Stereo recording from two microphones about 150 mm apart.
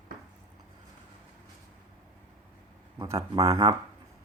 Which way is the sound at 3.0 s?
30° right (ahead or behind).